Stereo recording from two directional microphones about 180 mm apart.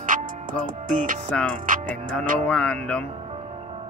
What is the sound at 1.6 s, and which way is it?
Speech, 45° right (ahead or behind).